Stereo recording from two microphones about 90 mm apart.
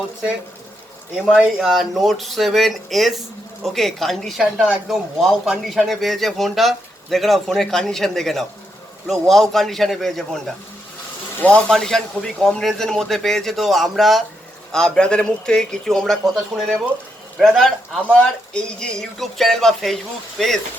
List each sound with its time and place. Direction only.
1.1 s speech: 10° right (ahead or behind)
11.3 s a man's voice: 15° left (ahead or behind)